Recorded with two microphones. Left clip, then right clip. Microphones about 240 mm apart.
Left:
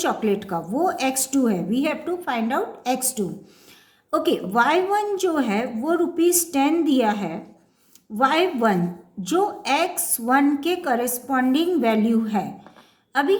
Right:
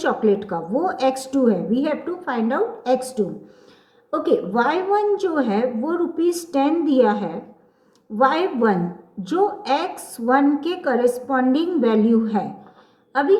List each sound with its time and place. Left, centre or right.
0.0 s a woman's voice: left